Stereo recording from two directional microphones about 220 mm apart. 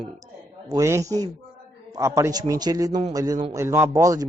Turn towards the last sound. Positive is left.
turn(degrees=-15)  # may be behind; listen again after turning